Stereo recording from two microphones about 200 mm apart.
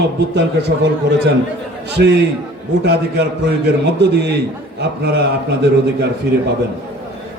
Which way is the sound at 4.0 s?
55° right (ahead or behind).